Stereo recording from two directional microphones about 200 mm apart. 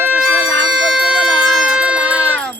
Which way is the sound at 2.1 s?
5° left (ahead or behind).